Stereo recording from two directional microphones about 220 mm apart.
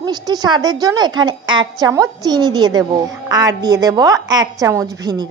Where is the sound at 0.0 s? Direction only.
20° right (ahead or behind).